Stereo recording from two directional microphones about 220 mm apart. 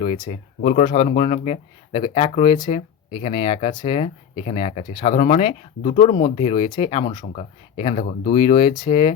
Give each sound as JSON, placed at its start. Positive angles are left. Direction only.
{"t": 0.0, "sound": "speech", "side_deg": 25}
{"t": 8.3, "sound": "speech", "side_deg": 20}